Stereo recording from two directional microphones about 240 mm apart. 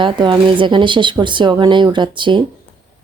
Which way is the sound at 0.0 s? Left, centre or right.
Centre.